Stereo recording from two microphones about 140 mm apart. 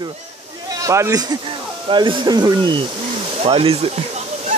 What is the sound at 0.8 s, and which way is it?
Speech, 20° right (ahead or behind).